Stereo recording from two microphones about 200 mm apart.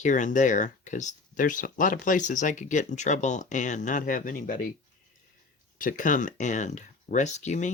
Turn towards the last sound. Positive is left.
turn(degrees=35)  # may be behind; listen again after turning